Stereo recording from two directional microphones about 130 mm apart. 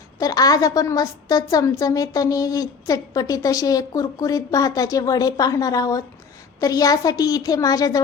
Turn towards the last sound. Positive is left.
turn(degrees=30)  # may be behind; listen again after turning